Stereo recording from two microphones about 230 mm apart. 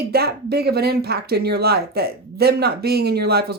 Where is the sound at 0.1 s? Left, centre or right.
Right.